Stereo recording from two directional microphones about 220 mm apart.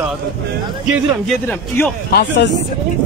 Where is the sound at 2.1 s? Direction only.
55° left (ahead or behind).